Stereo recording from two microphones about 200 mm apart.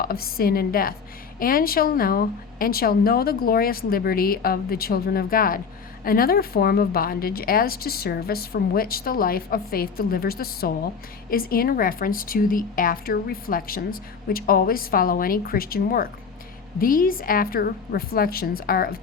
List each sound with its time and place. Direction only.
0.0 s a woman's voice: 50° left (ahead or behind)